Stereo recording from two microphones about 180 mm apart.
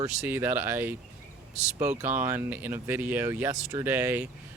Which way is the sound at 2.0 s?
10° right (ahead or behind).